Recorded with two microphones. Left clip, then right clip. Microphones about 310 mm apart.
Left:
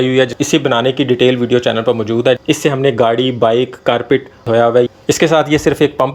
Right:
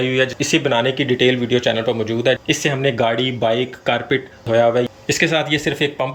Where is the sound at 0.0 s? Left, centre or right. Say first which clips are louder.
Left 5 dB; centre.